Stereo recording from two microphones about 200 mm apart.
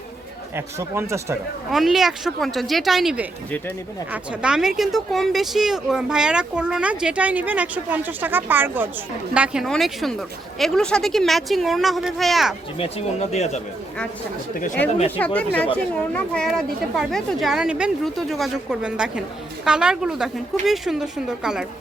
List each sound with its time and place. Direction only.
0.5 s speech: 15° right (ahead or behind)
1.7 s speech: centre (ahead or behind)
13.3 s speech: 35° left (ahead or behind)
15.2 s speech: 5° left (ahead or behind)